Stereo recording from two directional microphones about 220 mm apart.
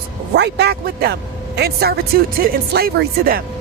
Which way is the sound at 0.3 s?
50° right (ahead or behind).